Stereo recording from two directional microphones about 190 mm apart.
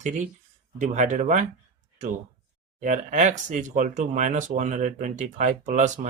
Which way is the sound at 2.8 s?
40° right (ahead or behind).